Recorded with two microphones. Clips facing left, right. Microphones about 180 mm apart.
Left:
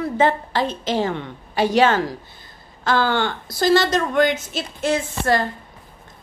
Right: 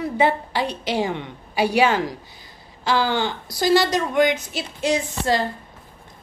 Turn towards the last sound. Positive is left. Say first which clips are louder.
# left 1 dB
turn(degrees=-15)  # may be behind; listen again after turning